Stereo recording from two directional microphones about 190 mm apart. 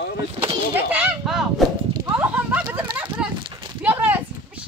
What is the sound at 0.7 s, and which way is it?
Speech, 10° right (ahead or behind).